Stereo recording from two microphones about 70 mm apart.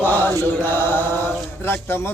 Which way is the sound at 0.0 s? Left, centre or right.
Left.